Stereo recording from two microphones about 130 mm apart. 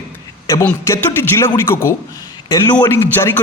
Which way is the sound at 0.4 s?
25° left (ahead or behind).